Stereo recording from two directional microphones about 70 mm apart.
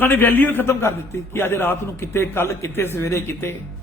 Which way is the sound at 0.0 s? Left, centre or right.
Left.